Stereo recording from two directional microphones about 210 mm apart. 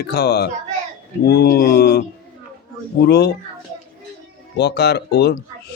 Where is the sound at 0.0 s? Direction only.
50° left (ahead or behind).